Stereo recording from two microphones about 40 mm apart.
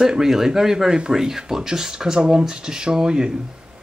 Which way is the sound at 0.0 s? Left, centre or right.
Centre.